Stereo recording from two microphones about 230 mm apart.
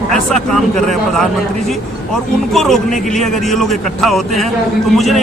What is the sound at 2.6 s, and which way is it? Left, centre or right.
A man's voice, centre.